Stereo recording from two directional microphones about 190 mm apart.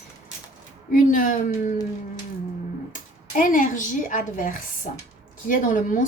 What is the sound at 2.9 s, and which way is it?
A woman's voice, 45° left (ahead or behind).